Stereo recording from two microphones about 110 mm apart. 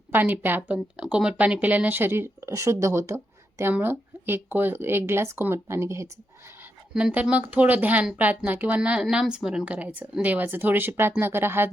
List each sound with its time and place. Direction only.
0.1 s a woman's voice: 15° right (ahead or behind)
6.9 s a woman's voice: 10° right (ahead or behind)